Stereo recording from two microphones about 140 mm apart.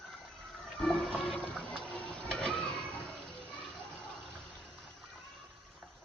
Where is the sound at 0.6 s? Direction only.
5° left (ahead or behind).